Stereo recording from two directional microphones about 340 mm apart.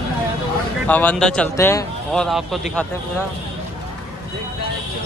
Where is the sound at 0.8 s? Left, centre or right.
Centre.